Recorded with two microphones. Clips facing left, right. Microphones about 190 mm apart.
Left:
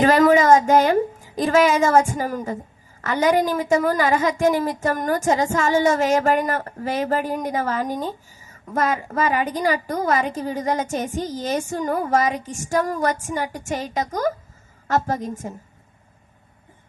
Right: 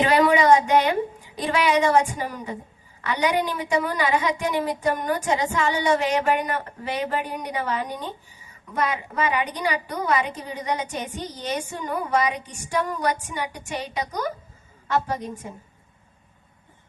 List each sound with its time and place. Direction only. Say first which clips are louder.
0.0 s a woman's voice: left 4 dB; 45° left (ahead or behind)